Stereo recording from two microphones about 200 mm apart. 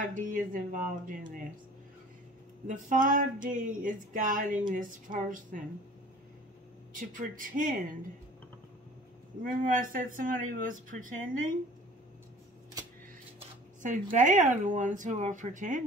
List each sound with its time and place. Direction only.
0.0 s speech: 40° right (ahead or behind)
2.6 s speech: 40° right (ahead or behind)
6.9 s speech: 40° right (ahead or behind)
9.4 s speech: 40° right (ahead or behind)
13.4 s speech: 35° right (ahead or behind)